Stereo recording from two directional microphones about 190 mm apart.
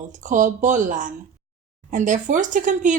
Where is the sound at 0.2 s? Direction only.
40° right (ahead or behind).